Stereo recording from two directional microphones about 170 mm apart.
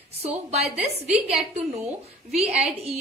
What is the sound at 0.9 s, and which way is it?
A woman's voice, 40° right (ahead or behind).